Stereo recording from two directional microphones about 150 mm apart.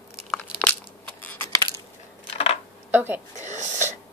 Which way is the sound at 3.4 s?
55° right (ahead or behind).